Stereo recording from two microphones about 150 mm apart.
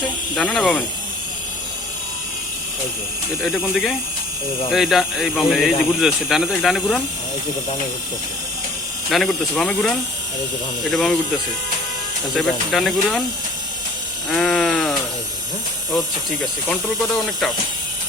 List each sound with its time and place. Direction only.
0.3 s speech: 5° left (ahead or behind)
4.7 s speech: centre (ahead or behind)
9.0 s speech: centre (ahead or behind)
12.4 s speech: 5° left (ahead or behind)
14.3 s sheep: 5° left (ahead or behind)
16.6 s speech: 10° left (ahead or behind)